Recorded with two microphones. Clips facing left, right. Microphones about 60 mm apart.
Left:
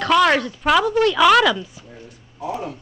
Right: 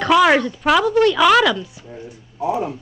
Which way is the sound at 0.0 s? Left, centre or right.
Centre.